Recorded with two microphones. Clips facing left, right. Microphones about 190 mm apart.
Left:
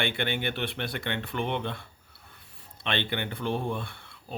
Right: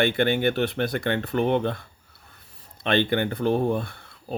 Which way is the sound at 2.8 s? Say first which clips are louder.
Right 9 dB; 45° right (ahead or behind).